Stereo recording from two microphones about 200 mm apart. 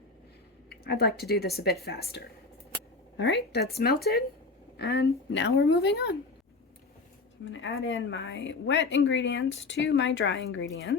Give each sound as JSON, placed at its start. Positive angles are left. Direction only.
{"t": 0.7, "sound": "a sound", "side_deg": 55}
{"t": 1.1, "sound": "speech", "side_deg": 50}
{"t": 7.4, "sound": "a woman's voice", "side_deg": 70}
{"t": 8.3, "sound": "speech", "side_deg": 65}